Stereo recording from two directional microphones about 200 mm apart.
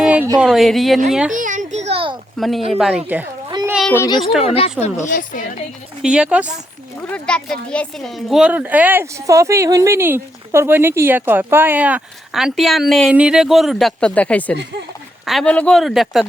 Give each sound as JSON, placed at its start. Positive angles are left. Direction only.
{"t": 0.0, "sound": "a sound", "side_deg": -5}
{"t": 0.3, "sound": "a woman's voice", "side_deg": 0}
{"t": 1.3, "sound": "a sound", "side_deg": -40}
{"t": 2.4, "sound": "a woman's voice", "side_deg": 0}
{"t": 3.7, "sound": "a sound", "side_deg": 0}
{"t": 3.9, "sound": "a woman's voice", "side_deg": 15}
{"t": 4.4, "sound": "a woman's voice", "side_deg": 30}
{"t": 6.0, "sound": "a woman's voice", "side_deg": -5}
{"t": 7.1, "sound": "a woman's voice", "side_deg": 5}